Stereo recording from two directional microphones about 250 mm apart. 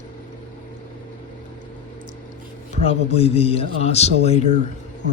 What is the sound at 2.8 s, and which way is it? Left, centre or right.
A man's voice, left.